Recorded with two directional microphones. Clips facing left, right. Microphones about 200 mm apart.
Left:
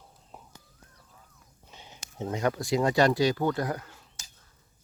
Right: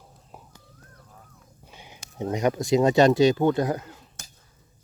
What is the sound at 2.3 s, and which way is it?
Speech, 20° right (ahead or behind).